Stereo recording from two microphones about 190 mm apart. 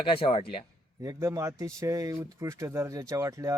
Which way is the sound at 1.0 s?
15° right (ahead or behind).